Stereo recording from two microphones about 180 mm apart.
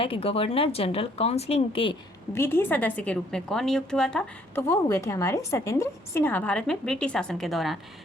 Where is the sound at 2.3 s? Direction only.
15° left (ahead or behind).